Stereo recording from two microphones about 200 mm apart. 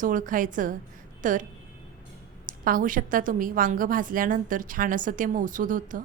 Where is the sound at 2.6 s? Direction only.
45° right (ahead or behind).